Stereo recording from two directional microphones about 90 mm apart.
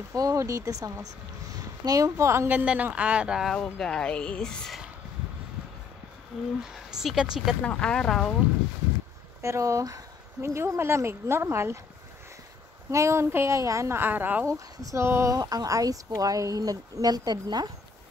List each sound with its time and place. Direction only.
0.1 s speech: 40° right (ahead or behind)
2.4 s speech: 15° right (ahead or behind)
3.5 s speech: 5° left (ahead or behind)
6.6 s speech: 5° right (ahead or behind)
7.6 s speech: 10° left (ahead or behind)
9.4 s speech: 35° right (ahead or behind)
12.9 s speech: 30° right (ahead or behind)
14.4 s speech: 40° right (ahead or behind)